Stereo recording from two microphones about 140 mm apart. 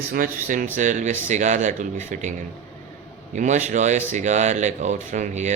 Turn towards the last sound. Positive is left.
turn(degrees=-60)  # may be behind; listen again after turning